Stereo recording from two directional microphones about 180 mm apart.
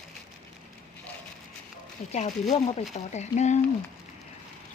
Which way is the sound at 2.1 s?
40° left (ahead or behind).